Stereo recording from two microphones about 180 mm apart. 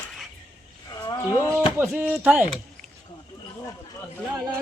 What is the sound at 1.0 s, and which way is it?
Roaring cats, 20° left (ahead or behind).